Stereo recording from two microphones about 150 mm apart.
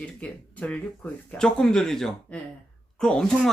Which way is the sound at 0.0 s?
10° left (ahead or behind).